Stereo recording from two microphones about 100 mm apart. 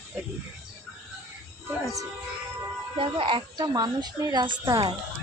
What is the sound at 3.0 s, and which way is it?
Speech, 60° right (ahead or behind).